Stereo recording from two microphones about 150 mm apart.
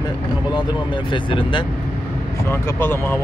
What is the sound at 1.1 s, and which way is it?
Speech, 35° left (ahead or behind).